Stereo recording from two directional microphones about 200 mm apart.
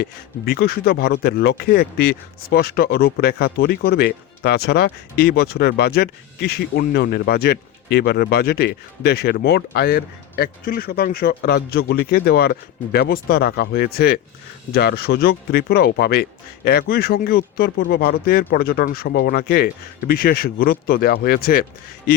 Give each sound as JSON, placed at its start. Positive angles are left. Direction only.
{"t": 0.0, "sound": "speech", "side_deg": 50}